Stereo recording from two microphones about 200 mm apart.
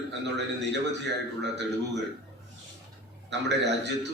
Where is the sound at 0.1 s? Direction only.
60° right (ahead or behind).